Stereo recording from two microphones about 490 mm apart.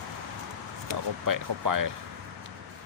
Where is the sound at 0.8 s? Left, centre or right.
Right.